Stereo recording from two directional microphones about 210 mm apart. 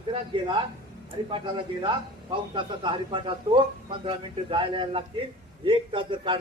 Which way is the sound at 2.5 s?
25° right (ahead or behind).